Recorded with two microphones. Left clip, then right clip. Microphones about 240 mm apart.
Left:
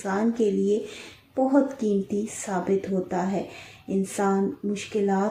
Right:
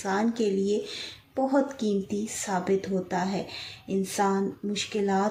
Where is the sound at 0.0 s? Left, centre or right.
Right.